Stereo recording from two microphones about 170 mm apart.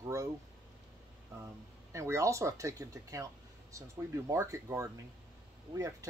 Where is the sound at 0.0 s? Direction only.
20° right (ahead or behind).